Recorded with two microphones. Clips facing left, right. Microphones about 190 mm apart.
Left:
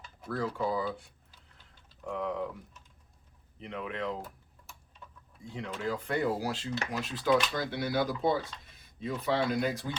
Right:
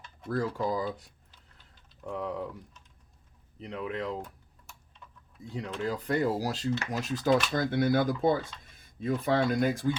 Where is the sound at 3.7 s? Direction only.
35° right (ahead or behind).